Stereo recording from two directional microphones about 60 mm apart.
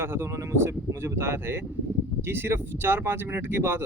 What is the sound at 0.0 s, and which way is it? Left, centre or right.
Speech, right.